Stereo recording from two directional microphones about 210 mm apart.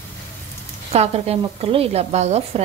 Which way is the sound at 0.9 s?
30° right (ahead or behind).